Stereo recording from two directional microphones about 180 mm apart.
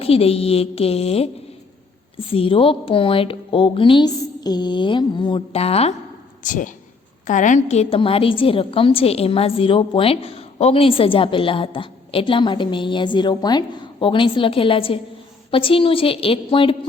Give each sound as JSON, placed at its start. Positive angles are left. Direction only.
{"t": 0.0, "sound": "a woman's voice", "side_deg": 35}
{"t": 6.4, "sound": "a woman's voice", "side_deg": 45}